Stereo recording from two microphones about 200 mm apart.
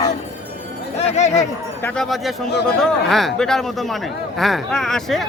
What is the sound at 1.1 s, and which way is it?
Speech, 35° left (ahead or behind).